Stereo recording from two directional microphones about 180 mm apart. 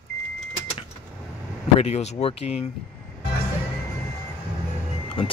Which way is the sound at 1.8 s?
35° left (ahead or behind).